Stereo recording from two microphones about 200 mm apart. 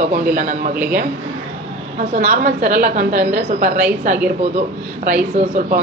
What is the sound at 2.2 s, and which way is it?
A woman's voice, 40° right (ahead or behind).